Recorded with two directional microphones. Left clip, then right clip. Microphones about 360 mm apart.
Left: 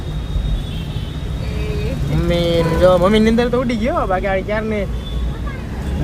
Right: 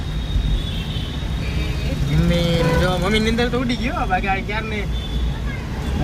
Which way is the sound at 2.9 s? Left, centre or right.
Centre.